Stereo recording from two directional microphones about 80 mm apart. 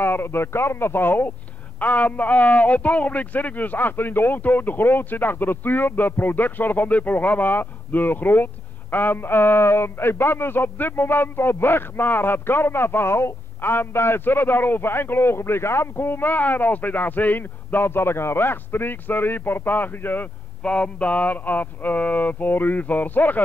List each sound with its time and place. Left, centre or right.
0.0 s speech: left
20.6 s speech: centre